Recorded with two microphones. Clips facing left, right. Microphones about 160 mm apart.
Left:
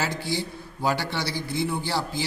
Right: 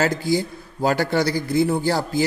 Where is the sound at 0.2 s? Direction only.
45° right (ahead or behind).